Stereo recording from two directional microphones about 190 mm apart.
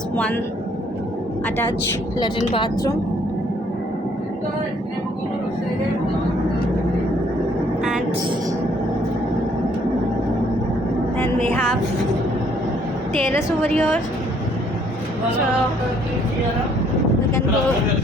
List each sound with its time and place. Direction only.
2.4 s a woman's voice: 25° left (ahead or behind)
11.2 s a woman's voice: 10° left (ahead or behind)
13.2 s a woman's voice: 10° left (ahead or behind)